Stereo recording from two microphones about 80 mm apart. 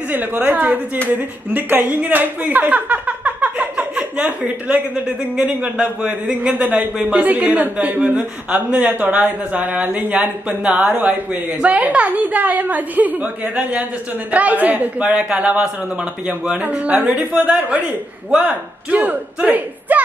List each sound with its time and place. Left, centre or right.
0.1 s speech: right